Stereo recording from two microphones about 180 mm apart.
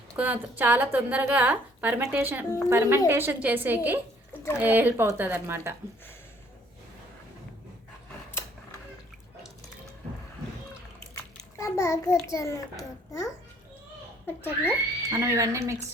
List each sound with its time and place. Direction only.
0.2 s a woman's voice: 10° right (ahead or behind)
11.1 s a child's voice: 15° left (ahead or behind)
14.3 s speech: 10° left (ahead or behind)
15.1 s a woman's voice: 15° right (ahead or behind)